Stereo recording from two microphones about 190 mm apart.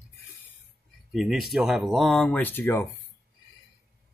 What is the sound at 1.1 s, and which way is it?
Speech, centre (ahead or behind).